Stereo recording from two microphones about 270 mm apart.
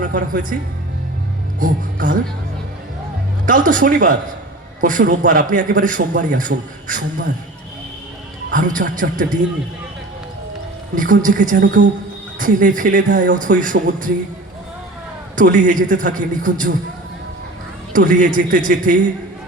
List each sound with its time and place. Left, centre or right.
0.0 s speech: right
1.5 s speech: right
3.4 s a man's voice: right
8.4 s a man's voice: right
10.9 s a man's voice: right
15.4 s a man's voice: right
17.9 s a man's voice: right